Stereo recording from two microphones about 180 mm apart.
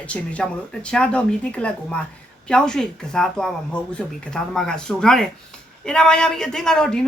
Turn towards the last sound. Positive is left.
turn(degrees=5)  # may be behind; listen again after turning